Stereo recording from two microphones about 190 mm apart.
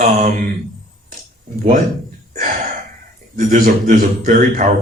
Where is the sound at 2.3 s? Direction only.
45° right (ahead or behind).